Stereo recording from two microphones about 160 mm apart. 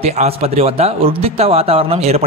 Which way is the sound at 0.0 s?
40° right (ahead or behind).